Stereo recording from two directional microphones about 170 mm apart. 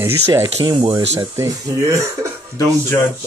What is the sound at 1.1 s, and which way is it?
Speech, 15° right (ahead or behind).